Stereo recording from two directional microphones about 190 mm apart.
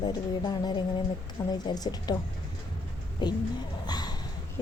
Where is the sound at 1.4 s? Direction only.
15° left (ahead or behind).